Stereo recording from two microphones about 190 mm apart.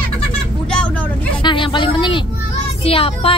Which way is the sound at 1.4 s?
25° left (ahead or behind).